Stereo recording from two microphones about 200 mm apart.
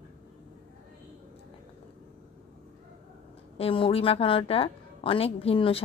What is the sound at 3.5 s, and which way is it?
A woman's voice, 30° left (ahead or behind).